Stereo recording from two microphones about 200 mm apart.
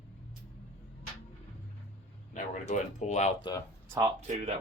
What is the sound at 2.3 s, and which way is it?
Speech, 35° left (ahead or behind).